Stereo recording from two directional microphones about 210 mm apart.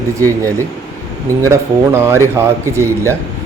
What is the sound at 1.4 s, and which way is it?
Speech, 15° right (ahead or behind).